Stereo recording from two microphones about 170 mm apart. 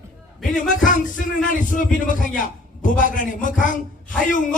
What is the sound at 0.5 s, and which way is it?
A man's voice, 50° left (ahead or behind).